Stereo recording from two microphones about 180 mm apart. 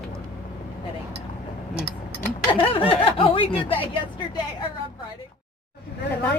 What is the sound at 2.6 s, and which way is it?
Speech, 30° left (ahead or behind).